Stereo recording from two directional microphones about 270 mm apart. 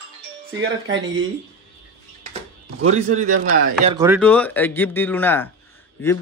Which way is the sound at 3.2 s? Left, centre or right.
Right.